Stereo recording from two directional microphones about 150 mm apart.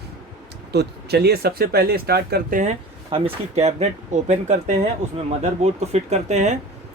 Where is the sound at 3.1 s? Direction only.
45° right (ahead or behind).